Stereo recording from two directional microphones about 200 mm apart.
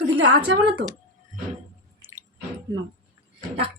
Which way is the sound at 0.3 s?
70° right (ahead or behind).